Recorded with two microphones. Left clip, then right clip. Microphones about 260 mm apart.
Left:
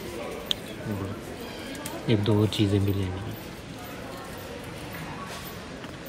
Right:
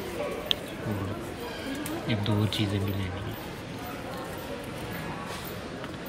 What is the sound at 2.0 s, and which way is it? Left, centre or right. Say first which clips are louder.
Speech: left 8 dB; centre.